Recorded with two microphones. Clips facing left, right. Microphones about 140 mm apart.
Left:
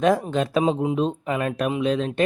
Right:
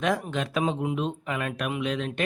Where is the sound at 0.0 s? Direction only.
35° left (ahead or behind).